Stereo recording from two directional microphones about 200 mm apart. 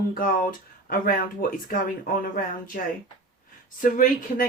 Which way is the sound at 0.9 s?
45° left (ahead or behind).